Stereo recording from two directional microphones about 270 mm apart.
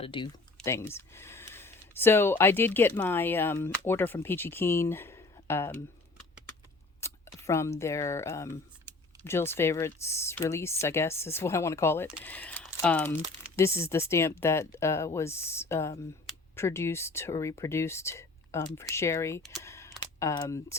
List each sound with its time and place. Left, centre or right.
0.0 s speech: centre
7.0 s speech: centre